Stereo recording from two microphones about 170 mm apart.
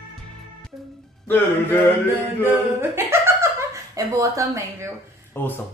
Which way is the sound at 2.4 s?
15° right (ahead or behind).